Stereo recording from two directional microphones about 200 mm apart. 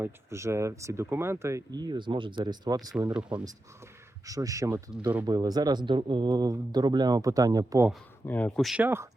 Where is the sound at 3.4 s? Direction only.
15° right (ahead or behind).